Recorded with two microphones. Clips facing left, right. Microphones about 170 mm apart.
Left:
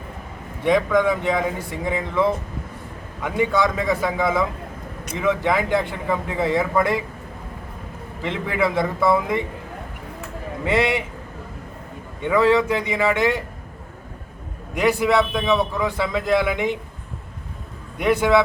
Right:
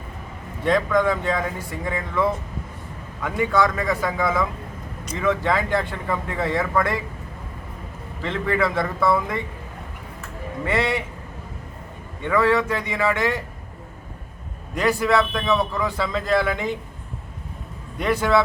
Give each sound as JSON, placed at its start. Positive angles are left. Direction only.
{"t": 0.9, "sound": "speech", "side_deg": 10}
{"t": 8.2, "sound": "speech", "side_deg": 15}
{"t": 10.7, "sound": "speech", "side_deg": 15}
{"t": 12.2, "sound": "speech", "side_deg": 20}
{"t": 14.8, "sound": "speech", "side_deg": 15}
{"t": 18.0, "sound": "speech", "side_deg": 15}